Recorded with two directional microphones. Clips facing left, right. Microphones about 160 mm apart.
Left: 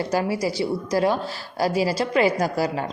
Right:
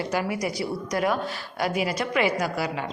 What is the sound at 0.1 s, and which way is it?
A woman's voice, 30° left (ahead or behind).